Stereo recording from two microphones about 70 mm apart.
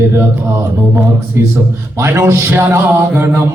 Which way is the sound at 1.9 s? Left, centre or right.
Right.